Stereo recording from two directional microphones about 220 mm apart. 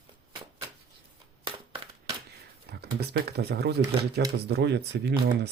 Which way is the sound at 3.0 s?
45° right (ahead or behind).